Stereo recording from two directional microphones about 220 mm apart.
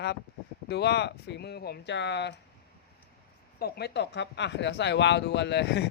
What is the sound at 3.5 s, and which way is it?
Speech, 45° left (ahead or behind).